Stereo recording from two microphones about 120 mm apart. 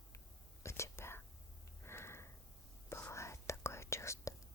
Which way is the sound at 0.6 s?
25° left (ahead or behind).